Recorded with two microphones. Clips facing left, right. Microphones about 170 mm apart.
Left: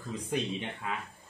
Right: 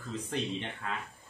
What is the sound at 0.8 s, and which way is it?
Speech, 10° left (ahead or behind).